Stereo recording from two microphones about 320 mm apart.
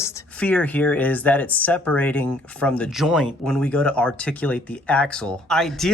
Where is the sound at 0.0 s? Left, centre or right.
Centre.